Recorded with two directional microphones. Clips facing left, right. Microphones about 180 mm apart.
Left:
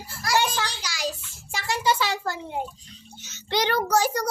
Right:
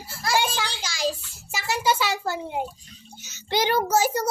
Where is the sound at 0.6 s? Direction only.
25° right (ahead or behind).